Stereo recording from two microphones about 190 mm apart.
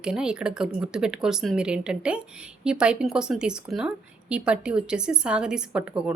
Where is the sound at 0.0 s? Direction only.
5° right (ahead or behind).